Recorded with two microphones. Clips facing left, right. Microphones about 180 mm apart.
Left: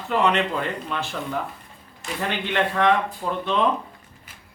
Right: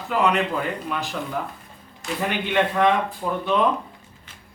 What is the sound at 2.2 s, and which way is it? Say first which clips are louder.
Speech: right 2 dB; 10° right (ahead or behind).